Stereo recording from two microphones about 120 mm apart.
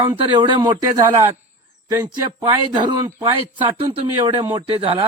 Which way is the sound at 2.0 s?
35° right (ahead or behind).